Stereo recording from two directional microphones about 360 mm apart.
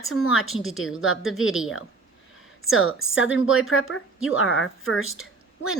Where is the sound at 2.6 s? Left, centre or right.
Left.